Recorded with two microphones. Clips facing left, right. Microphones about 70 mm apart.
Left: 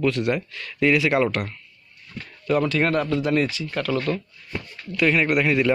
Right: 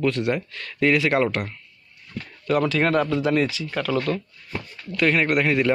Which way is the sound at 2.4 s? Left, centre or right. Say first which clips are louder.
Even; right.